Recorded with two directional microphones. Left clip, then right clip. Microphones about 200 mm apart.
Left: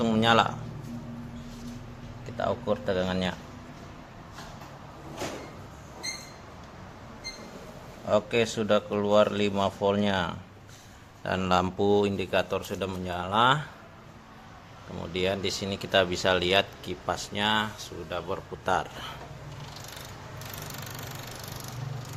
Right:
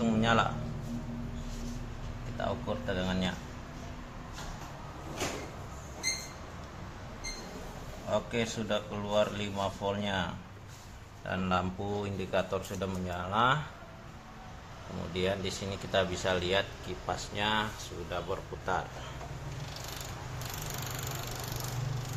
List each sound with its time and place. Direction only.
0.0 s a sound: 45° left (ahead or behind)
2.4 s a man's voice: 55° left (ahead or behind)
8.1 s a man's voice: 55° left (ahead or behind)
15.1 s a man's voice: 35° left (ahead or behind)